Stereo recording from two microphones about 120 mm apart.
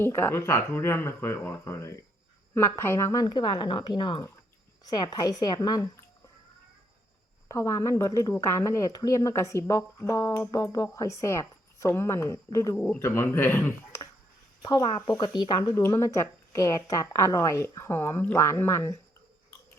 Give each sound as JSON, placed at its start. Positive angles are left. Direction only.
{"t": 0.0, "sound": "a woman's voice", "side_deg": 20}
{"t": 7.4, "sound": "a woman's voice", "side_deg": 30}
{"t": 12.7, "sound": "speech", "side_deg": 10}
{"t": 14.6, "sound": "a woman's voice", "side_deg": 35}